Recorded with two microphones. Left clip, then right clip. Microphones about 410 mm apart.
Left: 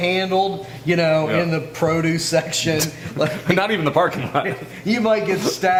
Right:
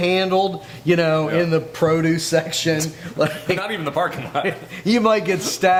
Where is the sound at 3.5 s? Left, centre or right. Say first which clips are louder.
Left 4 dB; left.